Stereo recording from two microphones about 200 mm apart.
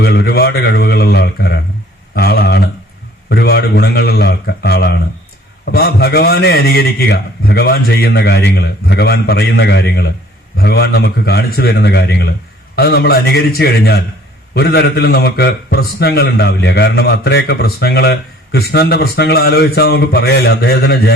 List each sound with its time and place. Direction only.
0.0 s a man's voice: 55° left (ahead or behind)
2.1 s a sound: 55° left (ahead or behind)
3.2 s a man's voice: 55° left (ahead or behind)